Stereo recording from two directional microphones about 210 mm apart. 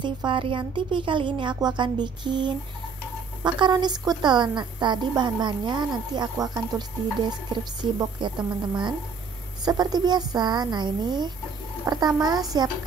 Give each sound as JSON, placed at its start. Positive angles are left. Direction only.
{"t": 0.0, "sound": "a woman's voice", "side_deg": -25}
{"t": 7.8, "sound": "a woman's voice", "side_deg": -20}